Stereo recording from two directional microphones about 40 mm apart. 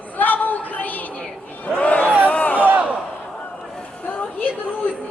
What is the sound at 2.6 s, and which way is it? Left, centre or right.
Crowd, right.